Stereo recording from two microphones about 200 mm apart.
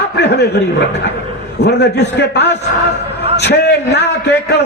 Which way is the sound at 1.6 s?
55° left (ahead or behind).